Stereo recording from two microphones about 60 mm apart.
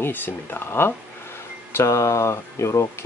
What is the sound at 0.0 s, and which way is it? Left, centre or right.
Speech, left.